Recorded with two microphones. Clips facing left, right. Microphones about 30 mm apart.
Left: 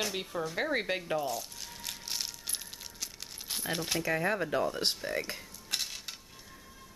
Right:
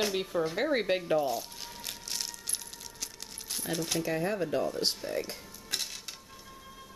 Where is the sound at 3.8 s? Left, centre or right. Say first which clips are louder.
Right 3 dB; centre.